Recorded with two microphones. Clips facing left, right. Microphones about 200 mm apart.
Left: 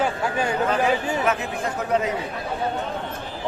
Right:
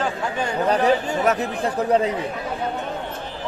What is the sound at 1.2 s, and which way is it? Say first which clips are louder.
Speech: right 3 dB; 40° right (ahead or behind).